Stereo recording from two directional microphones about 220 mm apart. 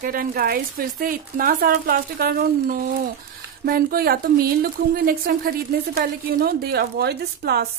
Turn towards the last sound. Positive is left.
turn(degrees=-45)  # may be behind; listen again after turning